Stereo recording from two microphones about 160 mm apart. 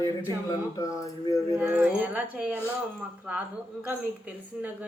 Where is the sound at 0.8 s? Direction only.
20° left (ahead or behind).